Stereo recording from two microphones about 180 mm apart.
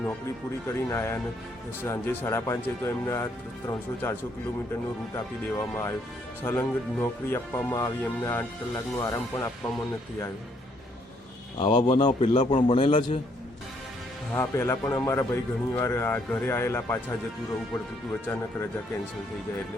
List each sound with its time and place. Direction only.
0.8 s speech: 15° left (ahead or behind)
11.5 s speech: 30° left (ahead or behind)
14.3 s speech: 15° left (ahead or behind)